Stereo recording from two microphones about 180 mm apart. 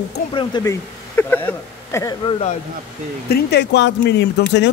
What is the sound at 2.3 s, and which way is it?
Speech, 35° left (ahead or behind).